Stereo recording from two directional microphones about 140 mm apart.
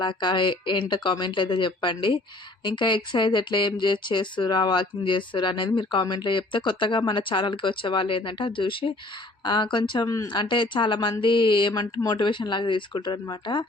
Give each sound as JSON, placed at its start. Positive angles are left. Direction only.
{"t": 0.0, "sound": "speech", "side_deg": 35}